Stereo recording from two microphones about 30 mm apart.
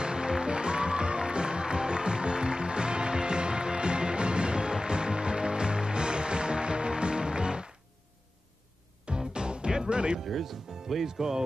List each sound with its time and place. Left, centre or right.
0.0 s music: right
9.0 s music: right
10.2 s speech: centre
11.1 s speech: centre